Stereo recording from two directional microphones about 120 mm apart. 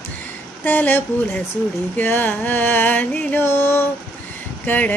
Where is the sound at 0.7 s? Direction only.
15° left (ahead or behind).